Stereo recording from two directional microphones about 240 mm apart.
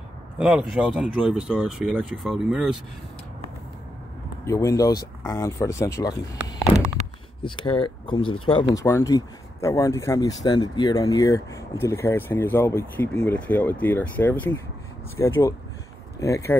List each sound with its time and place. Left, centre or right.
0.4 s speech: centre
4.5 s speech: centre
7.4 s speech: left